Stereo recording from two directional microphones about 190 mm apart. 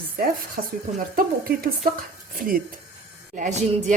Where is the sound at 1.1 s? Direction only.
50° right (ahead or behind).